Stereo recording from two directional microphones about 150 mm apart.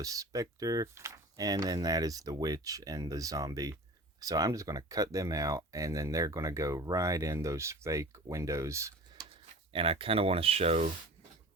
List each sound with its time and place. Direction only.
0.0 s speech: 20° right (ahead or behind)
9.3 s speech: 40° right (ahead or behind)